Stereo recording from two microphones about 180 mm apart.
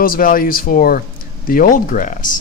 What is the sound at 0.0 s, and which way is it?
Speech, 50° left (ahead or behind).